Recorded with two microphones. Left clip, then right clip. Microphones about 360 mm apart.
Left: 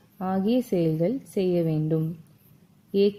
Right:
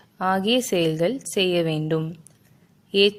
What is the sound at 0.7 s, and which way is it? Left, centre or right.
A woman's voice, right.